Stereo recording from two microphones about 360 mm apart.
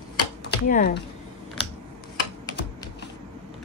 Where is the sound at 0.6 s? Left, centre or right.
Left.